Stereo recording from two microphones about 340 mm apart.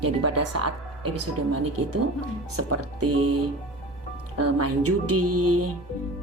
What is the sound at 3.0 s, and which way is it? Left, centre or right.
Music, right.